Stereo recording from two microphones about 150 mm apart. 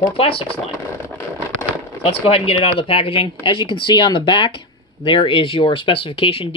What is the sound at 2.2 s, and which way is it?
Speech, 40° left (ahead or behind).